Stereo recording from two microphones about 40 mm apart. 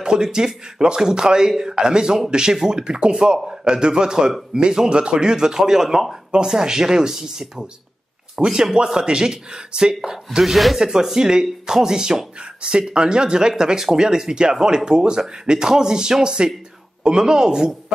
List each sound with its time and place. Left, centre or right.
0.0 s speech: centre
6.3 s speech: centre
10.4 s speech: centre
10.8 s speech: centre